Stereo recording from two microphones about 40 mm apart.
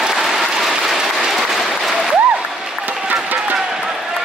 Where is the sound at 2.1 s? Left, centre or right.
Right.